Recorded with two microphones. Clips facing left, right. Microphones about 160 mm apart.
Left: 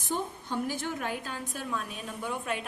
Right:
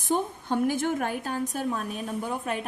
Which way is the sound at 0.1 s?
55° right (ahead or behind).